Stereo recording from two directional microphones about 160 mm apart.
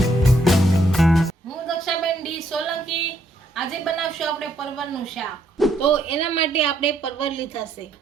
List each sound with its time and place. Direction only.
0.2 s music: centre (ahead or behind)
3.5 s a woman's voice: centre (ahead or behind)
5.8 s a woman's voice: 35° left (ahead or behind)